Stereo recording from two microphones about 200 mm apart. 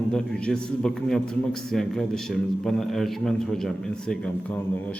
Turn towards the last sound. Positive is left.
turn(degrees=10)  # may be behind; listen again after turning